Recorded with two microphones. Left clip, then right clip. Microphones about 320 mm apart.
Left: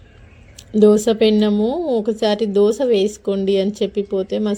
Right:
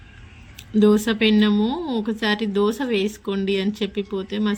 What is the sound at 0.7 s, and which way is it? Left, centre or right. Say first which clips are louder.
Speech: left 6 dB; centre.